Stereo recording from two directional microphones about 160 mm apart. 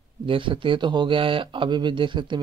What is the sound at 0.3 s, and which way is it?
Speech, 30° right (ahead or behind).